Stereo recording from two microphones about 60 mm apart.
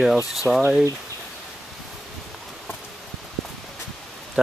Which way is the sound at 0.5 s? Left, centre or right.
Right.